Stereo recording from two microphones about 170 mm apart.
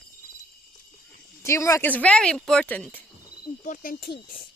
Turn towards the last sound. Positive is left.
turn(degrees=60)  # may be behind; listen again after turning